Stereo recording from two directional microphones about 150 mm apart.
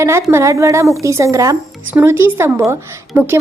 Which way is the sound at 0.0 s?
20° right (ahead or behind).